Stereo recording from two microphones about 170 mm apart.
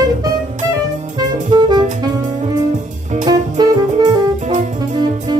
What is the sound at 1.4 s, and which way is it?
Music, 25° right (ahead or behind).